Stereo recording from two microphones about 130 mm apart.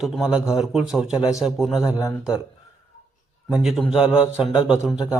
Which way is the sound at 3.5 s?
5° right (ahead or behind).